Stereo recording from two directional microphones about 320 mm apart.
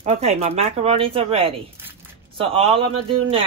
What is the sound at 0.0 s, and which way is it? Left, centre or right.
Speech, centre.